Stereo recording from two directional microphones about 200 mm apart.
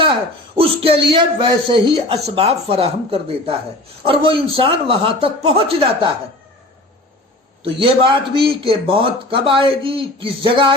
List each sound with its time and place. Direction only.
0.0 s speech: 25° right (ahead or behind)
7.6 s speech: 25° right (ahead or behind)